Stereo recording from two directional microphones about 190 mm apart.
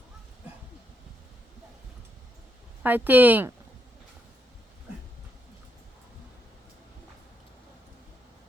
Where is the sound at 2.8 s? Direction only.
10° right (ahead or behind).